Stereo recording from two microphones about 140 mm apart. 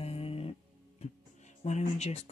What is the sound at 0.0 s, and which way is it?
Music, 45° left (ahead or behind).